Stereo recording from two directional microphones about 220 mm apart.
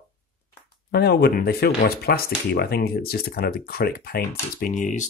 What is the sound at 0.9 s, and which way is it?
Speech, 45° left (ahead or behind).